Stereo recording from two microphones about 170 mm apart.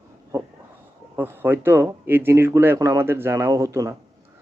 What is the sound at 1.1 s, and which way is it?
Speech, 15° right (ahead or behind).